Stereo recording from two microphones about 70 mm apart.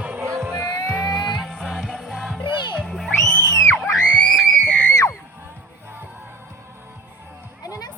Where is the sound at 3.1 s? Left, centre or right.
Left.